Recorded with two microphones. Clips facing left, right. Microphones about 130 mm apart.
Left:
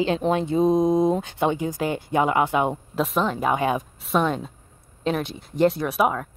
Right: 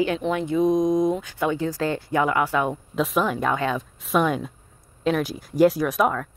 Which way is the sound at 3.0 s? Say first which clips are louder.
Right 1 dB; 5° right (ahead or behind).